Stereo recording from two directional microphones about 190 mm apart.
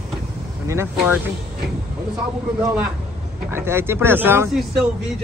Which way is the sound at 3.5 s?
15° right (ahead or behind).